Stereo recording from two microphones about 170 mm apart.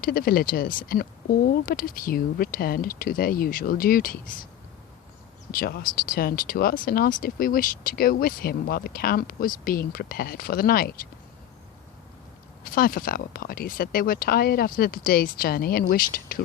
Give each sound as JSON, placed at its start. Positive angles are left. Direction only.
{"t": 0.0, "sound": "speech", "side_deg": 60}
{"t": 5.5, "sound": "speech", "side_deg": 60}
{"t": 12.6, "sound": "speech", "side_deg": 55}